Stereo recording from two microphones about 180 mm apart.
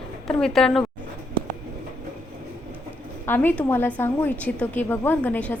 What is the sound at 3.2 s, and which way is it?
A woman's voice, 10° left (ahead or behind).